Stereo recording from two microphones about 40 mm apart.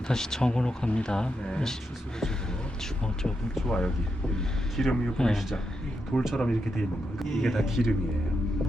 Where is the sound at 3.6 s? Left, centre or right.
Centre.